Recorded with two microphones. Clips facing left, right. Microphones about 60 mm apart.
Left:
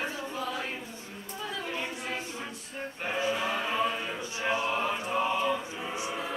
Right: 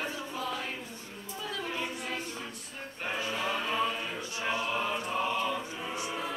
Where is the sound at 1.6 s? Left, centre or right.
Centre.